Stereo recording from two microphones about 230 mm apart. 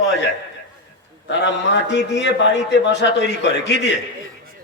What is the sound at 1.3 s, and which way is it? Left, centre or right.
A man's voice, left.